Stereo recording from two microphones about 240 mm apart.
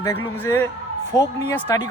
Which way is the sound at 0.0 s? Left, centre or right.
Centre.